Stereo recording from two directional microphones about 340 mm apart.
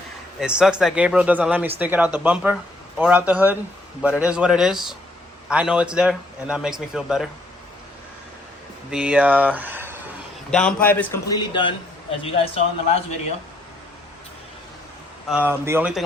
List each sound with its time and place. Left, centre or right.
0.3 s a man's voice: centre
8.9 s a man's voice: centre
15.3 s a man's voice: centre